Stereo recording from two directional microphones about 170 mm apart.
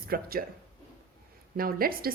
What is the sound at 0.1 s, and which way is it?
Speech, 60° right (ahead or behind).